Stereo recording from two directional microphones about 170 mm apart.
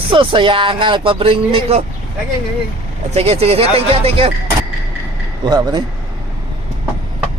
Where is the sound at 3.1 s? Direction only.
35° right (ahead or behind).